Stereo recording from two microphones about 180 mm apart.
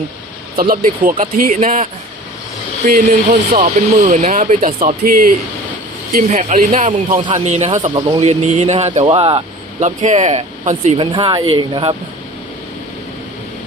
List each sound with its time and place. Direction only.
0.5 s speech: 50° right (ahead or behind)
7.2 s speech: 30° right (ahead or behind)
9.8 s speech: 40° right (ahead or behind)
11.0 s speech: 25° right (ahead or behind)